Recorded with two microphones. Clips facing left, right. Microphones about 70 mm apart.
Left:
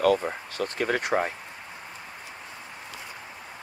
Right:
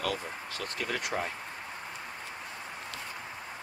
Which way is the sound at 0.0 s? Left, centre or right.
Left.